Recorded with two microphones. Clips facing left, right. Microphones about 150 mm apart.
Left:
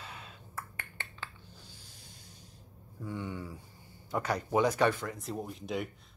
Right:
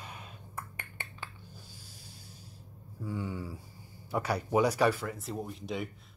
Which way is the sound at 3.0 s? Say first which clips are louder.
Right 2 dB; 10° right (ahead or behind).